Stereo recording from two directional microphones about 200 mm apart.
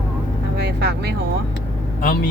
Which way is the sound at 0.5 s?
55° right (ahead or behind).